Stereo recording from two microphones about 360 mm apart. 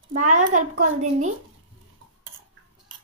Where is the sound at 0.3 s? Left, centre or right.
Right.